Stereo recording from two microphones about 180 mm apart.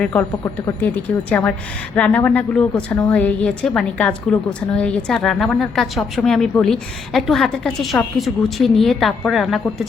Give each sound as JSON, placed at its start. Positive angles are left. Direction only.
{"t": 0.0, "sound": "speech", "side_deg": 10}
{"t": 1.3, "sound": "a woman's voice", "side_deg": 10}